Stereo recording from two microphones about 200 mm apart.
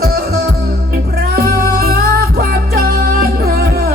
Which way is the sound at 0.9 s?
50° right (ahead or behind).